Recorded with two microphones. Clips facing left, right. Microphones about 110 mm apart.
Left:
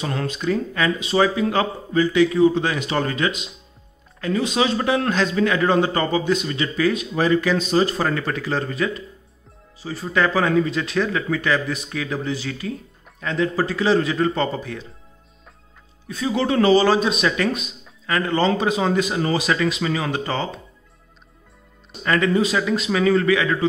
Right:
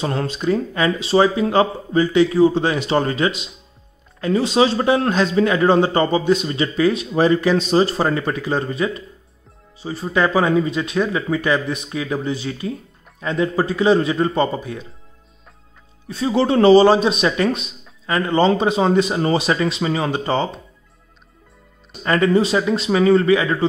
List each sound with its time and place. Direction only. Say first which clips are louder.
0.0 s a man's voice: right 3 dB; 30° right (ahead or behind)
16.1 s a man's voice: right 4 dB; 30° right (ahead or behind)
22.0 s a man's voice: right 3 dB; 30° right (ahead or behind)